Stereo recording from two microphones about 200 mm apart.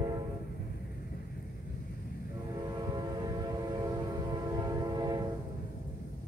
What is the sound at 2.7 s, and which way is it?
Train, 20° right (ahead or behind).